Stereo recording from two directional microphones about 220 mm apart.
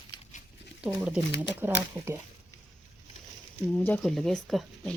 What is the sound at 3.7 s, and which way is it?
Speech, 5° left (ahead or behind).